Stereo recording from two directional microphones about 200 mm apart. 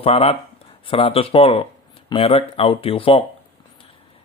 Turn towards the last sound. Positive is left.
turn(degrees=30)  # may be behind; listen again after turning